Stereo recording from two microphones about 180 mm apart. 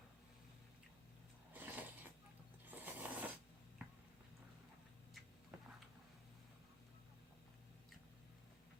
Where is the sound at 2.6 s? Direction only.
10° right (ahead or behind).